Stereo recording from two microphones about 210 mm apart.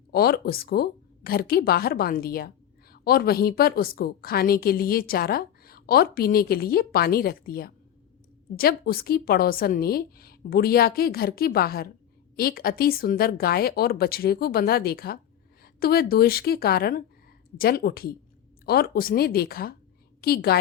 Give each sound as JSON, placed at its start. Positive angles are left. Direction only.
{"t": 0.1, "sound": "a woman's voice", "side_deg": 45}